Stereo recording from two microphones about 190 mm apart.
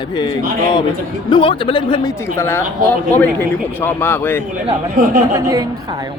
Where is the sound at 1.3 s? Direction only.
25° left (ahead or behind).